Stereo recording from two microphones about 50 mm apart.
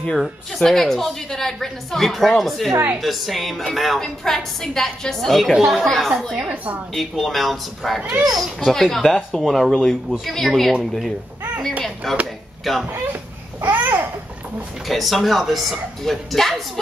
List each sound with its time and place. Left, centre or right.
0.1 s a woman's voice: centre
6.3 s a woman's voice: right
7.0 s a woman's voice: centre
13.6 s babbling: right
14.9 s a woman's voice: centre